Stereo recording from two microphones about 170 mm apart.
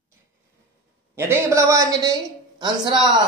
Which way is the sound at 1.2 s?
15° right (ahead or behind).